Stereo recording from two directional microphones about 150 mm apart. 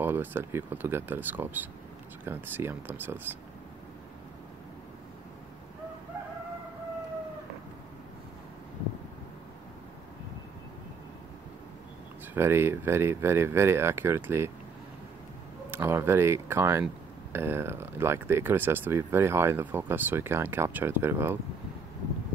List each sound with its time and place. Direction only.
0.0 s speech: 15° right (ahead or behind)
12.4 s speech: 15° right (ahead or behind)
15.7 s speech: 15° right (ahead or behind)